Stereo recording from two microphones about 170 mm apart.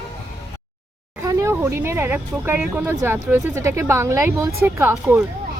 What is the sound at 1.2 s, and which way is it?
Speech, 20° right (ahead or behind).